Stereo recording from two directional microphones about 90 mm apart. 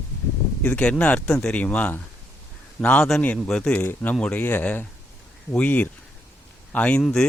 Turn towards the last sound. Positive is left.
turn(degrees=5)  # may be behind; listen again after turning